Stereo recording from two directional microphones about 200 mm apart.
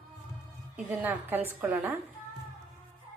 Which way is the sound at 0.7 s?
10° right (ahead or behind).